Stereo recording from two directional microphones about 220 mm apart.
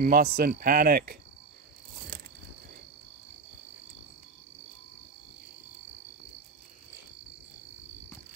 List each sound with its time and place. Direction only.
0.0 s speech: 40° right (ahead or behind)